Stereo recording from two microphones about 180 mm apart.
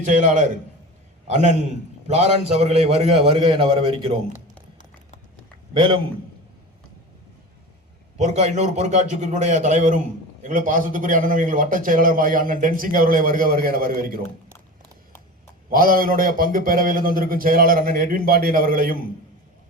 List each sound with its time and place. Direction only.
0.0 s a man's voice: 45° right (ahead or behind)
5.7 s a man's voice: 25° right (ahead or behind)
8.2 s a man's voice: 35° right (ahead or behind); by 14.2 s 55° right (ahead or behind)
15.7 s a man's voice: 55° right (ahead or behind)